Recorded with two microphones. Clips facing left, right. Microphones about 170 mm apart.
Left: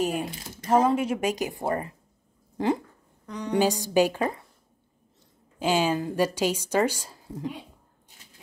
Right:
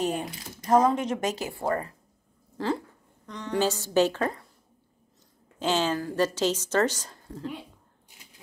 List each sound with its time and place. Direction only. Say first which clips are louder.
0.7 s a woman's voice: even; 10° left (ahead or behind)
5.6 s a woman's voice: left 2 dB; 10° left (ahead or behind)